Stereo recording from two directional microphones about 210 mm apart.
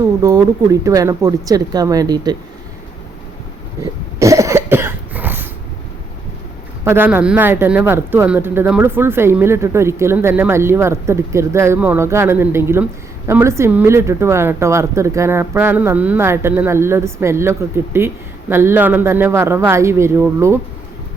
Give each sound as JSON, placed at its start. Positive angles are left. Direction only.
{"t": 0.2, "sound": "speech", "side_deg": -15}
{"t": 4.2, "sound": "cough", "side_deg": -15}
{"t": 6.8, "sound": "speech", "side_deg": -10}